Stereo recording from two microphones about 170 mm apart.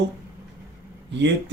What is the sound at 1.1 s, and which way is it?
Speech, 90° right.